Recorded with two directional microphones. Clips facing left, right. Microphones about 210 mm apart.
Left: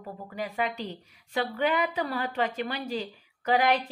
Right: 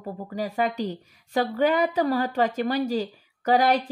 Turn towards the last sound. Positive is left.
turn(degrees=-40)  # may be behind; listen again after turning